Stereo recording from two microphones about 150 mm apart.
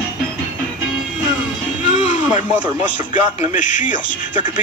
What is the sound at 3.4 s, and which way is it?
Speech, 55° left (ahead or behind).